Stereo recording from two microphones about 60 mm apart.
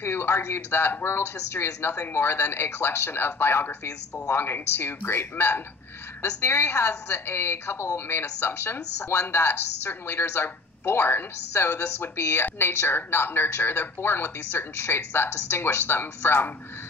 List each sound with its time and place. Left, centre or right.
0.0 s a woman's voice: left